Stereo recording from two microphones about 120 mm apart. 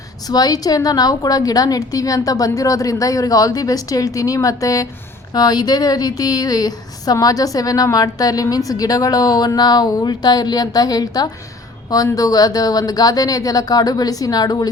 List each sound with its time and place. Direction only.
0.3 s a woman's voice: 35° left (ahead or behind)